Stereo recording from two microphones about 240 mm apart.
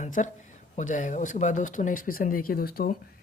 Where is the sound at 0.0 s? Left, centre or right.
Left.